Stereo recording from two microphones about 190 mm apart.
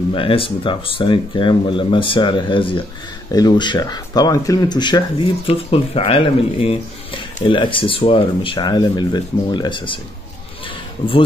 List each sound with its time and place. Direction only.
0.1 s speech: 30° left (ahead or behind)